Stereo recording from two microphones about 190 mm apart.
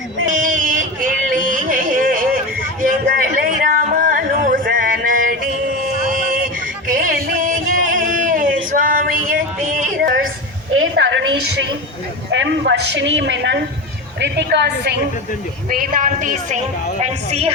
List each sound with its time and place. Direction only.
0.3 s a sound: 45° right (ahead or behind)
6.9 s music: 45° right (ahead or behind)
7.9 s male singing: 45° right (ahead or behind)
10.8 s a sound: 75° right (ahead or behind)
12.3 s a man's voice: 70° right (ahead or behind)
15.7 s a woman's voice: 45° right (ahead or behind)
17.0 s speech: 35° right (ahead or behind)